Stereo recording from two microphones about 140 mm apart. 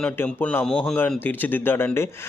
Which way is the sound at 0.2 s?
10° left (ahead or behind).